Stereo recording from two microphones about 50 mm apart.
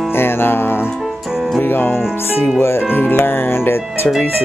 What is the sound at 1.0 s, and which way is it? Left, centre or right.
Music, centre.